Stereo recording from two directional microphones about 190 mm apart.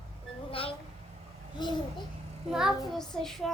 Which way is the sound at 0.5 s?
30° left (ahead or behind).